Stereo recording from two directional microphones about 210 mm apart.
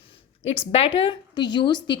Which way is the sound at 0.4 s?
30° left (ahead or behind).